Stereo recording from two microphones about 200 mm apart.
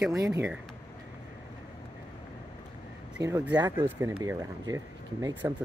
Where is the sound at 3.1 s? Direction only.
10° right (ahead or behind).